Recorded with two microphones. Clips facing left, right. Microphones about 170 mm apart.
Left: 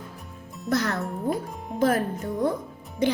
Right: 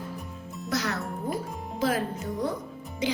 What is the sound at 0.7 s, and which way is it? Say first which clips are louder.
Speech: left 5 dB; 55° left (ahead or behind).